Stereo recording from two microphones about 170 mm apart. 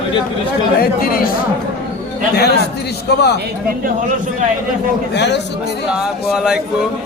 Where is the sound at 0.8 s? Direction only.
60° left (ahead or behind).